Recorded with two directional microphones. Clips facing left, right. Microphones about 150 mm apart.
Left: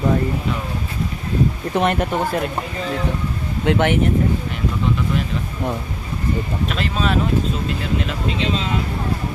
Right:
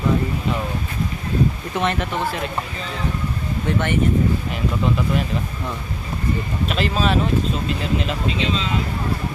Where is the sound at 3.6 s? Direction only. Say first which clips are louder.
Left 6 dB; 70° left (ahead or behind).